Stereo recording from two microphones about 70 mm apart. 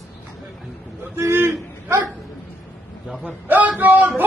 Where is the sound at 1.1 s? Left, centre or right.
Right.